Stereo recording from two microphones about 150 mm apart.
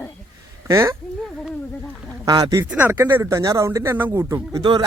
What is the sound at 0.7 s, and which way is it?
Speech, 20° right (ahead or behind).